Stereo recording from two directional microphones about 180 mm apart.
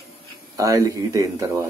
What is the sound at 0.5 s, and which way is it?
Speech, 20° right (ahead or behind).